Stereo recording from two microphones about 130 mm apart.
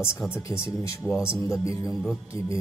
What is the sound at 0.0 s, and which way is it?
A man's voice, 20° left (ahead or behind).